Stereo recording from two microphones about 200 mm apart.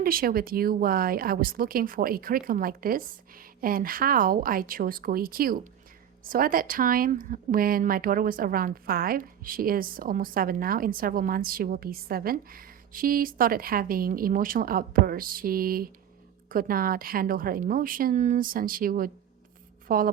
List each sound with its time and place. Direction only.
0.0 s speech: 45° right (ahead or behind)